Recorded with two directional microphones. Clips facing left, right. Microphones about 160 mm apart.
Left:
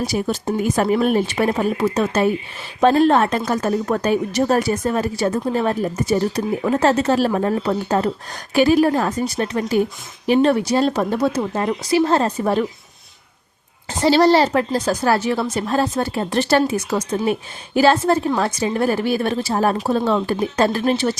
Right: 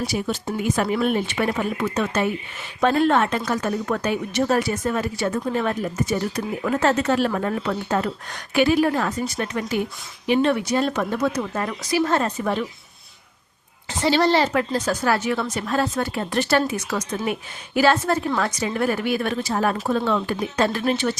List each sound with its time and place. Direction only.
0.0 s a woman's voice: 40° left (ahead or behind)
14.0 s a woman's voice: 35° left (ahead or behind)